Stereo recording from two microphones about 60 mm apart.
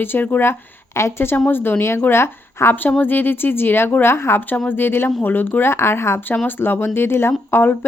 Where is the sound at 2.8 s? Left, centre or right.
Left.